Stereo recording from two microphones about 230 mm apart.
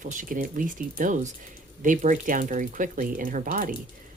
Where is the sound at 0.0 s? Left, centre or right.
Right.